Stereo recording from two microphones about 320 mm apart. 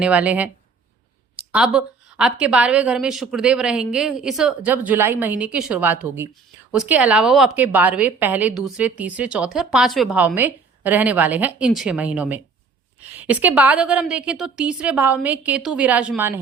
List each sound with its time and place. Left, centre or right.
0.0 s a woman's voice: centre
1.5 s a woman's voice: centre